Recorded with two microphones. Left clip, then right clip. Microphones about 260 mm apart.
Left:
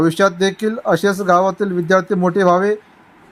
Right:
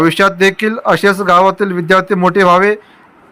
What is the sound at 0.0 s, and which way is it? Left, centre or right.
A man's voice, centre.